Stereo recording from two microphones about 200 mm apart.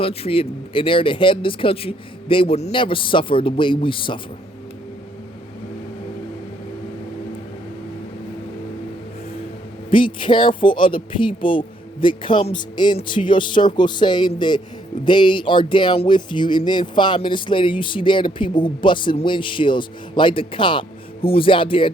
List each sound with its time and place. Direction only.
0.0 s speech: 30° left (ahead or behind)
9.9 s speech: 25° left (ahead or behind)